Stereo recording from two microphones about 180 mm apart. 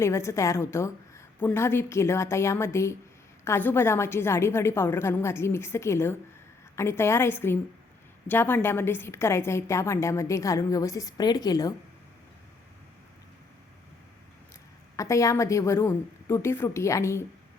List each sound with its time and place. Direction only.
0.0 s a woman's voice: 15° left (ahead or behind)
14.9 s a woman's voice: 15° left (ahead or behind)